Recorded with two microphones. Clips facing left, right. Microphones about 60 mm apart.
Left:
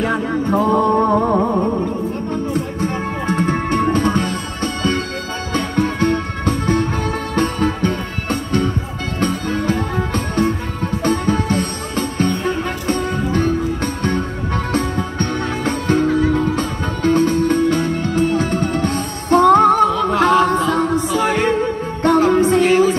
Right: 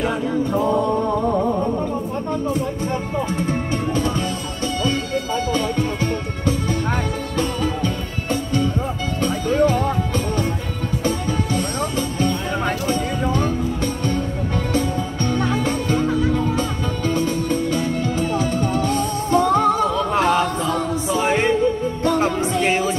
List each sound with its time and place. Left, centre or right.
0.0 s music: left
2.5 s music: left
21.2 s music: right
22.3 s music: left
22.6 s music: right